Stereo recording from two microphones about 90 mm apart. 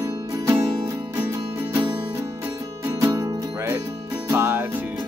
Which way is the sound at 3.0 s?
35° right (ahead or behind).